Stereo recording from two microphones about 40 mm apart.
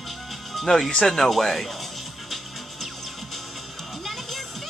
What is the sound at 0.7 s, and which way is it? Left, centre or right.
Speech, centre.